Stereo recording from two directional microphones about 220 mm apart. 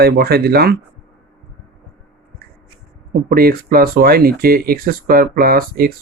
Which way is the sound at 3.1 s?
40° right (ahead or behind).